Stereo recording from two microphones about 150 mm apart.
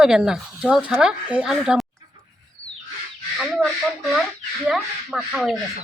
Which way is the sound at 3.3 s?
Centre (ahead or behind).